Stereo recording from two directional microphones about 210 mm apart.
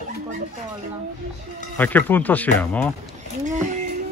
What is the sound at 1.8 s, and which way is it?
Speech, 10° left (ahead or behind).